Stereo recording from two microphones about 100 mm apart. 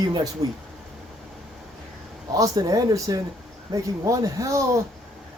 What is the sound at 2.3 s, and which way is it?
Speech, 35° right (ahead or behind).